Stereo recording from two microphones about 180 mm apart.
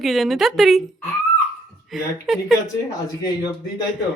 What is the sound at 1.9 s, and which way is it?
Speech, centre (ahead or behind).